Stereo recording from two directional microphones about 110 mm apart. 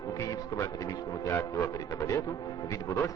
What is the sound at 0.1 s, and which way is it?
A man's voice, 30° left (ahead or behind).